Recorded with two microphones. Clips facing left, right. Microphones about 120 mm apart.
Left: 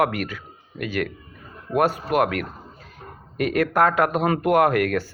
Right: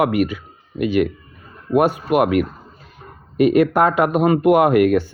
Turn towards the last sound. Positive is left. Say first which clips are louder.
# right 5 dB
turn(degrees=-20)  # may be behind; listen again after turning